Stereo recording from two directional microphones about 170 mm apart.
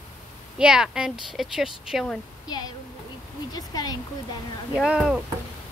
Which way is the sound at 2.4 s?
25° left (ahead or behind).